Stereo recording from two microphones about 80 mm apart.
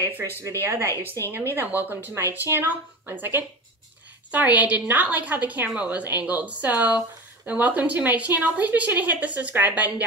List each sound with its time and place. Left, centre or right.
0.4 s speech: right
0.8 s a woman's voice: left
1.5 s a woman's voice: right